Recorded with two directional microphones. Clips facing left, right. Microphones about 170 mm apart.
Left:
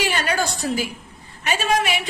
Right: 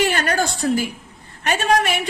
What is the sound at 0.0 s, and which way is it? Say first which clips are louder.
A woman's voice: right 3 dB; 50° right (ahead or behind).